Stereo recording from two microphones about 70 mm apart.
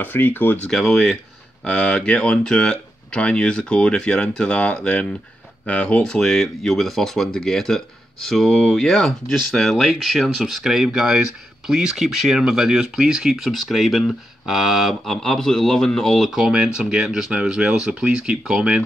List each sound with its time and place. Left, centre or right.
0.0 s speech: left
0.7 s speech: centre
1.6 s speech: centre
15.2 s speech: centre
16.4 s speech: centre